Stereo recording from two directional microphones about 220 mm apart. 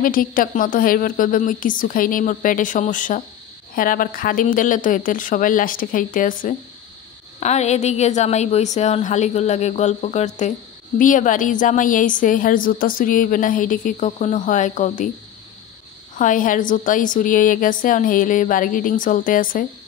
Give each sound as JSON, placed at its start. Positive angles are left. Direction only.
{"t": 0.0, "sound": "a woman's voice", "side_deg": 40}
{"t": 16.2, "sound": "a woman's voice", "side_deg": 35}